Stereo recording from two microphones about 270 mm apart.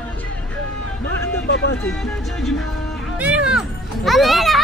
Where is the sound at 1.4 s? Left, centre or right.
Left.